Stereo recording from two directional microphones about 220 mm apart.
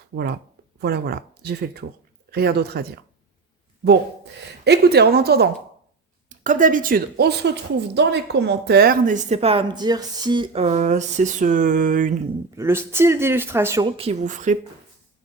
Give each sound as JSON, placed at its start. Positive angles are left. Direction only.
{"t": 0.1, "sound": "speech", "side_deg": -45}
{"t": 4.6, "sound": "a woman's voice", "side_deg": -50}
{"t": 12.5, "sound": "speech", "side_deg": -10}
{"t": 13.9, "sound": "a woman's voice", "side_deg": -25}